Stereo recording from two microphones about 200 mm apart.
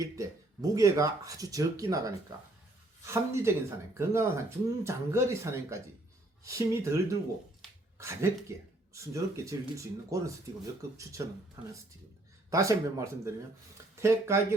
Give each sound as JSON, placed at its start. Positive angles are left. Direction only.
{"t": 0.0, "sound": "speech", "side_deg": -15}
{"t": 11.2, "sound": "speech", "side_deg": -15}
{"t": 12.5, "sound": "speech", "side_deg": -15}